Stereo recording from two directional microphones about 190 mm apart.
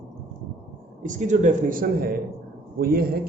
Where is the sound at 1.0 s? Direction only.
40° right (ahead or behind).